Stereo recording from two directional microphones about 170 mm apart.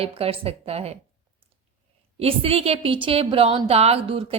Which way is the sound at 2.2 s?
35° right (ahead or behind).